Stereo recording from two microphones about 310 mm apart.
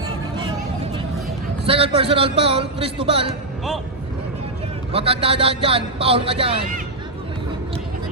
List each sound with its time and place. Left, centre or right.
1.6 s a man's voice: centre
4.9 s a man's voice: centre